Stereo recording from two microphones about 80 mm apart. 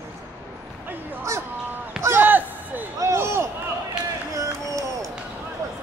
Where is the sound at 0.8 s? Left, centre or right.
Right.